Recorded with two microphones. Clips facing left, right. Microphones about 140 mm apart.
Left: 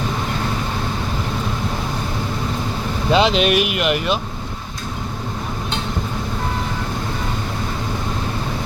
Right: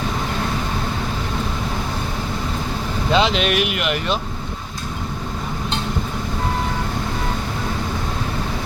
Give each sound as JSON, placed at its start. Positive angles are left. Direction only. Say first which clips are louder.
{"t": 3.1, "sound": "speech", "louder": "left 3 dB", "side_deg": 20}